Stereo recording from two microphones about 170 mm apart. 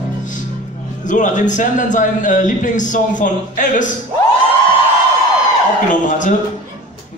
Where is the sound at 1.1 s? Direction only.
45° left (ahead or behind).